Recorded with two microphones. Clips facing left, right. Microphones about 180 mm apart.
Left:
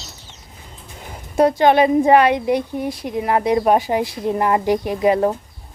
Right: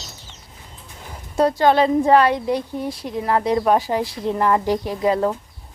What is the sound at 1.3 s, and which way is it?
A woman's voice, 20° left (ahead or behind).